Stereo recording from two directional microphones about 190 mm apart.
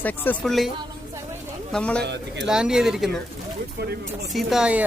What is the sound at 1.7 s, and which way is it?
Speech, 5° left (ahead or behind).